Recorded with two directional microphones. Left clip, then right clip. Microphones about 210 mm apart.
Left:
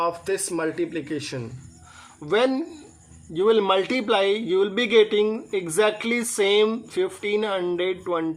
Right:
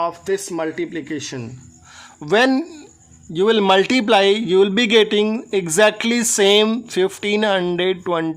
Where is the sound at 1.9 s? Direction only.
50° right (ahead or behind).